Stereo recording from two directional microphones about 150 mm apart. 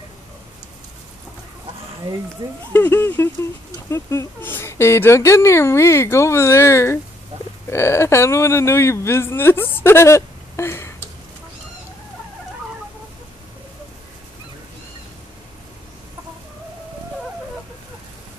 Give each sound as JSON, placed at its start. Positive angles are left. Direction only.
{"t": 2.7, "sound": "speech", "side_deg": 15}